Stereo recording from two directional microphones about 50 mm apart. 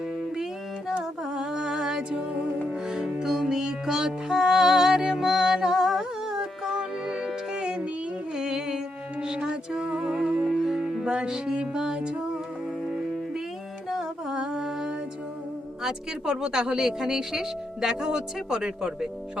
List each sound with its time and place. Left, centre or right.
1.3 s music: centre
11.0 s music: centre
14.3 s mantra: centre
15.8 s speech: centre